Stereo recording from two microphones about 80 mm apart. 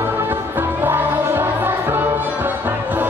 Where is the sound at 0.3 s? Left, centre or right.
Right.